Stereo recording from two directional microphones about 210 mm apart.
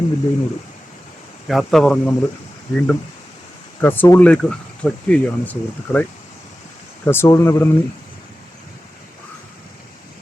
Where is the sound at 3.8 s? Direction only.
10° left (ahead or behind).